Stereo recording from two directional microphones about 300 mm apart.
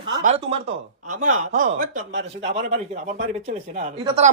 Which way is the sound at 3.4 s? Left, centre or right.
Right.